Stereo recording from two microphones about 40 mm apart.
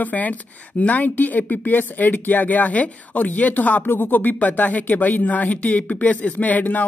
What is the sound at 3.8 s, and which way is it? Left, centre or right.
Speech, left.